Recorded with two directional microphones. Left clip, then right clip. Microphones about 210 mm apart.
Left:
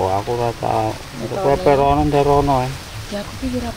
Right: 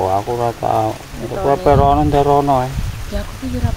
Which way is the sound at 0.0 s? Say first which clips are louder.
Right 2 dB; 20° right (ahead or behind).